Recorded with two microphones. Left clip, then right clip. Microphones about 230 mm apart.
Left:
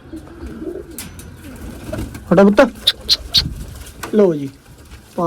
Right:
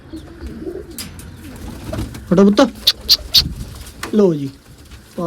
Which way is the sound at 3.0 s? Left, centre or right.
Right.